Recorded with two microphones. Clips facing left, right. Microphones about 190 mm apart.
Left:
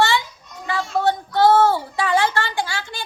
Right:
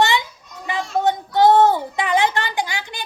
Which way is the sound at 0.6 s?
20° right (ahead or behind).